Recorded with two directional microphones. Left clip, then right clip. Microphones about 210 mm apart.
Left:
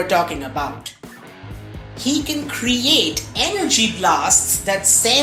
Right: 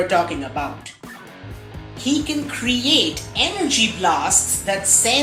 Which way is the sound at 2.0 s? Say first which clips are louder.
Even; 25° left (ahead or behind).